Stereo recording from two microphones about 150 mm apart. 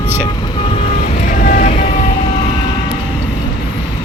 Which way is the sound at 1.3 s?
60° left (ahead or behind).